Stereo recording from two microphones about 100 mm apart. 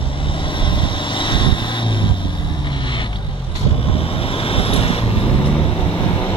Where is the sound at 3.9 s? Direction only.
70° left (ahead or behind).